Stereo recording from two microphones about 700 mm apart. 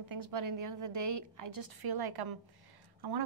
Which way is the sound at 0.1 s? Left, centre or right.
Right.